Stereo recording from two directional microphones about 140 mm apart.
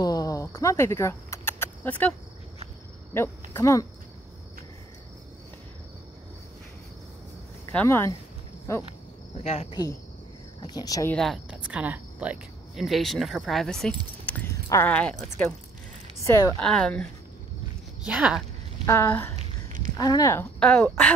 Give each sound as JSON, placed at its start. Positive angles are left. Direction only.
{"t": 0.0, "sound": "vehicle", "side_deg": 25}
{"t": 3.5, "sound": "speech", "side_deg": 20}
{"t": 7.7, "sound": "a woman's voice", "side_deg": 15}
{"t": 9.4, "sound": "cricket", "side_deg": 50}
{"t": 9.7, "sound": "speech", "side_deg": 30}
{"t": 11.1, "sound": "speech", "side_deg": 0}
{"t": 14.2, "sound": "keys jangling", "side_deg": 10}
{"t": 14.7, "sound": "a woman's voice", "side_deg": 15}
{"t": 16.2, "sound": "speech", "side_deg": 20}
{"t": 16.5, "sound": "a woman's voice", "side_deg": 5}
{"t": 18.0, "sound": "speech", "side_deg": -5}
{"t": 18.9, "sound": "a woman's voice", "side_deg": 15}
{"t": 20.0, "sound": "speech", "side_deg": 25}
{"t": 20.5, "sound": "a woman's voice", "side_deg": 10}